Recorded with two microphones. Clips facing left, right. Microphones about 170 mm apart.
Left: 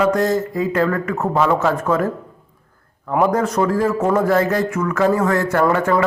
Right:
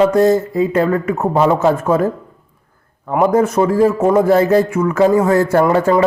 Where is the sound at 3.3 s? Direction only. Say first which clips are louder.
Right 4 dB; 25° right (ahead or behind).